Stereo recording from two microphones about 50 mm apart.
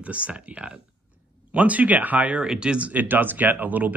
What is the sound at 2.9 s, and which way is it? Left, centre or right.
Speech, right.